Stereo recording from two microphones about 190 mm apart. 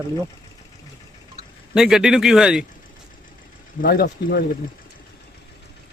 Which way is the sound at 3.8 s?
50° left (ahead or behind).